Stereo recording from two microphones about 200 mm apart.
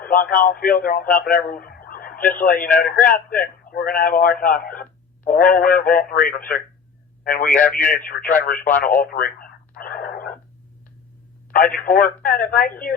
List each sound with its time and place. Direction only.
0.0 s speech: 45° left (ahead or behind)
9.0 s radio: 45° left (ahead or behind)
11.5 s speech: 45° left (ahead or behind)